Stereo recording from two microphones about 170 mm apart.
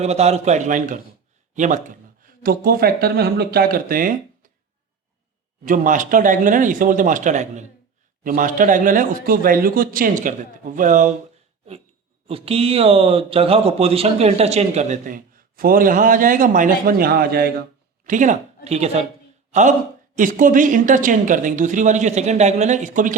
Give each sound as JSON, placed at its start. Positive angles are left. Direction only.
{"t": 0.0, "sound": "speech", "side_deg": -40}
{"t": 5.6, "sound": "speech", "side_deg": -50}
{"t": 12.3, "sound": "speech", "side_deg": -35}
{"t": 18.0, "sound": "speech", "side_deg": -50}